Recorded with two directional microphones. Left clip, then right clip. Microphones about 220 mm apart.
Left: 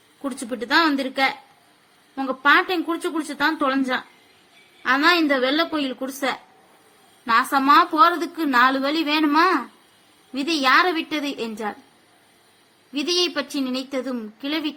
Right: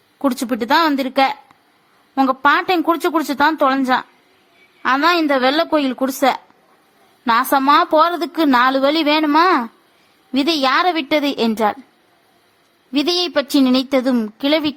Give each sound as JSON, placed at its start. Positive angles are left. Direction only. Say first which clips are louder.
{"t": 0.2, "sound": "a woman's voice", "louder": "right 9 dB", "side_deg": -50}
{"t": 12.9, "sound": "a woman's voice", "louder": "right 5 dB", "side_deg": -50}